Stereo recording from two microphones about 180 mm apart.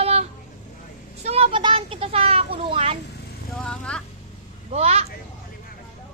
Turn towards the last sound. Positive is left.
turn(degrees=-35)  # may be behind; listen again after turning